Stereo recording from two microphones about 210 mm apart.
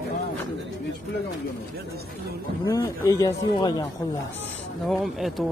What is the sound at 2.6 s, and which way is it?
Speech, 15° left (ahead or behind).